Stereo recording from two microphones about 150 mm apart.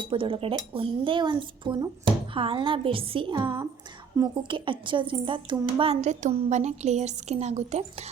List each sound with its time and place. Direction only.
0.1 s a woman's voice: 35° right (ahead or behind)